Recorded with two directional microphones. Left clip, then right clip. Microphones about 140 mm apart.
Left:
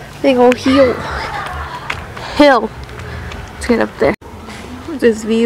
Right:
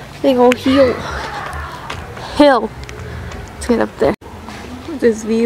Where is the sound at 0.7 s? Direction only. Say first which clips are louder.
Left 1 dB; centre (ahead or behind).